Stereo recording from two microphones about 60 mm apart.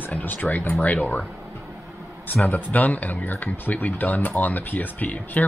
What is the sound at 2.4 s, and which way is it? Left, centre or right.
Speech, left.